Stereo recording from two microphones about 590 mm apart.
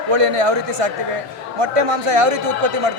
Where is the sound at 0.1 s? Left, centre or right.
Right.